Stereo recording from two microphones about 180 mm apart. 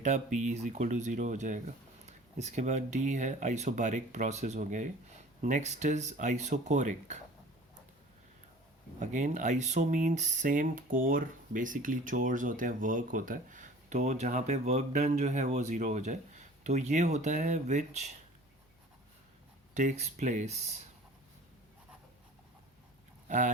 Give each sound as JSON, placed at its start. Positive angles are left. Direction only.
{"t": 0.0, "sound": "speech", "side_deg": -40}
{"t": 9.0, "sound": "speech", "side_deg": -45}
{"t": 19.7, "sound": "speech", "side_deg": -40}